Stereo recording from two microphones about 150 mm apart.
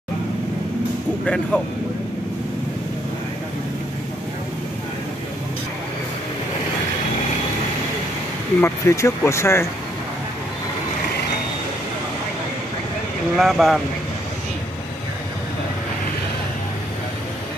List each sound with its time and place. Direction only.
1.2 s speech: 5° left (ahead or behind)
8.5 s speech: 20° left (ahead or behind)
13.4 s speech: centre (ahead or behind)